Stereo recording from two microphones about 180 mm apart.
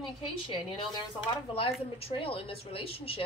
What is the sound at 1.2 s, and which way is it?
A woman's voice, 30° left (ahead or behind).